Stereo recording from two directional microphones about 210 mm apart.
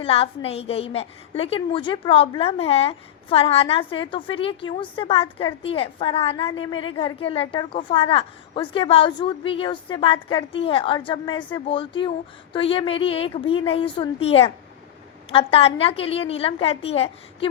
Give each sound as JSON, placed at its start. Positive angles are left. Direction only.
{"t": 0.0, "sound": "a woman's voice", "side_deg": 25}